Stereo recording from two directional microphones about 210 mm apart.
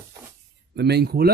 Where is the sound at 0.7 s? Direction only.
50° right (ahead or behind).